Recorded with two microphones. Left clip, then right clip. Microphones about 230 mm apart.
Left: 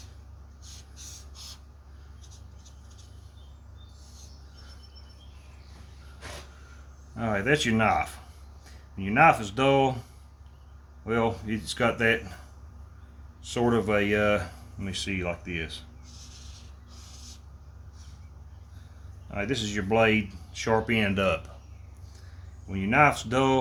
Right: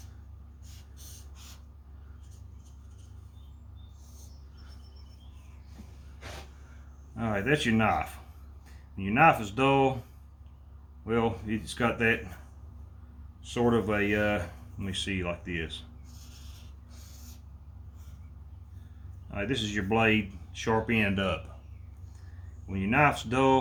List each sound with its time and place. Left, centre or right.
7.2 s speech: left
11.0 s speech: left
13.4 s speech: left
16.1 s a sound: centre
19.3 s speech: left
22.7 s speech: left